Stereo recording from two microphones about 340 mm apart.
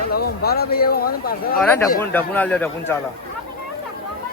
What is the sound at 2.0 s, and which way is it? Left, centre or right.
A man's voice, centre.